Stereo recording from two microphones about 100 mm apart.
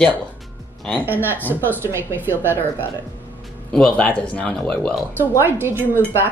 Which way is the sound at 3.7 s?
10° left (ahead or behind).